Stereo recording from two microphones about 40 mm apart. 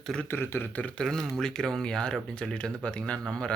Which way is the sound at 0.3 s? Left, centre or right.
Left.